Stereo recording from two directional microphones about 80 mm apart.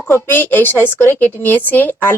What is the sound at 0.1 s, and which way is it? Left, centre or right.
Speech, left.